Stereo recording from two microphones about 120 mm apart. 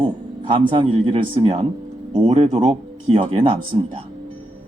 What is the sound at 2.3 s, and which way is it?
Speech, 65° right (ahead or behind).